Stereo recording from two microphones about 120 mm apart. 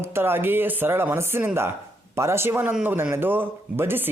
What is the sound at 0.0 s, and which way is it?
Speech, 20° right (ahead or behind).